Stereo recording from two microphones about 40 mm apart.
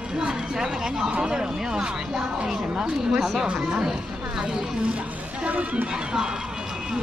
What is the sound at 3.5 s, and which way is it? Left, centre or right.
Speech, centre.